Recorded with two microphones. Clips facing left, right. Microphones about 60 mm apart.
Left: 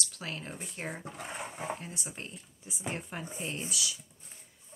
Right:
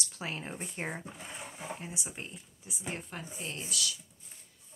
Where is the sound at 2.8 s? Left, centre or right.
Centre.